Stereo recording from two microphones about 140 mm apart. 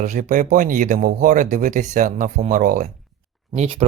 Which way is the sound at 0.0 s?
65° right (ahead or behind).